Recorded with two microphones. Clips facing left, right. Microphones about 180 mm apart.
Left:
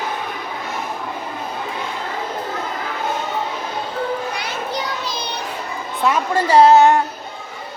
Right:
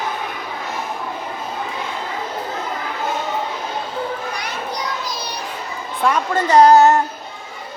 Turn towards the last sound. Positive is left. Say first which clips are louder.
# even
turn(degrees=0)  # may be behind; listen again after turning